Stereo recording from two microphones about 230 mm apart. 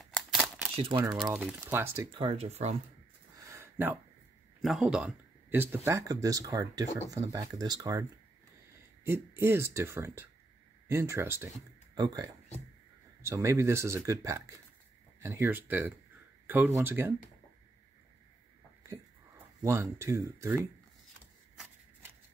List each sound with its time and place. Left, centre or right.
0.0 s camera: centre
0.7 s speech: right
1.1 s speech: centre
2.1 s speech: right
3.3 s a sound: centre
4.6 s speech: centre
19.6 s speech: centre